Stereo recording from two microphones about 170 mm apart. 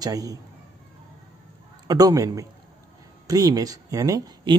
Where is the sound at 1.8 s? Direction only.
20° right (ahead or behind).